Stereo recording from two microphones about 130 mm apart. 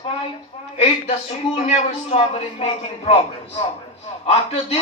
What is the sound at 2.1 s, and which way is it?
Speech, 65° left (ahead or behind).